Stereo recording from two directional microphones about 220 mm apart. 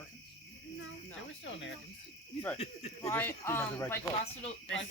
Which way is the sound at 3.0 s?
10° left (ahead or behind).